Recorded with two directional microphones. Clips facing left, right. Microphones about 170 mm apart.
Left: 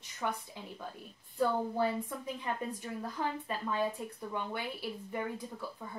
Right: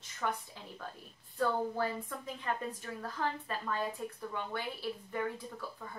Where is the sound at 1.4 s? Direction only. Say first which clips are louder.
Left 2 dB; 15° left (ahead or behind).